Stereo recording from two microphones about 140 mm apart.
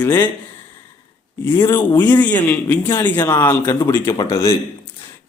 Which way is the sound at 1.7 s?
10° left (ahead or behind).